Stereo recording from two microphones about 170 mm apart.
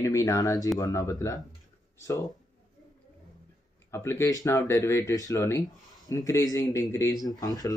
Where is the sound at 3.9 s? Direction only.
15° left (ahead or behind).